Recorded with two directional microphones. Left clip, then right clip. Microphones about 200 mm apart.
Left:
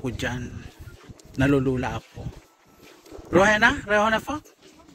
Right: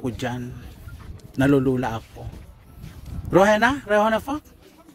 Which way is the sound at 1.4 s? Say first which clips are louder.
Right 3 dB; 25° right (ahead or behind).